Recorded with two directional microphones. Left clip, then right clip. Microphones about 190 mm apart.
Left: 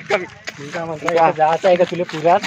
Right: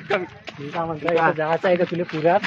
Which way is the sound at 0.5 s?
25° left (ahead or behind).